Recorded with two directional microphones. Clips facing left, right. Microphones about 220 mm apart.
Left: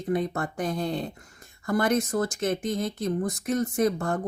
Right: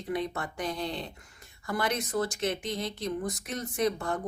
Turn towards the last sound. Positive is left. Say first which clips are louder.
# left 4 dB
turn(degrees=45)  # may be behind; listen again after turning